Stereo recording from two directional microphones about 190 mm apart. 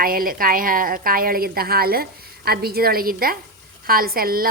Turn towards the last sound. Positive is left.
turn(degrees=-50)  # may be behind; listen again after turning